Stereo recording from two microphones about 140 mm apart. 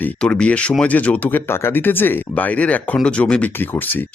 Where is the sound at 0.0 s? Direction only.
10° left (ahead or behind).